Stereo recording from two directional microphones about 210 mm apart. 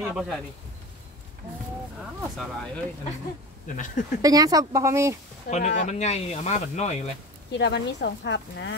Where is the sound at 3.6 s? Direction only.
40° left (ahead or behind).